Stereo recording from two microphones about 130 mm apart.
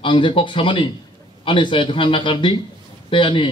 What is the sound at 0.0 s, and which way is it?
A man's voice, 40° left (ahead or behind).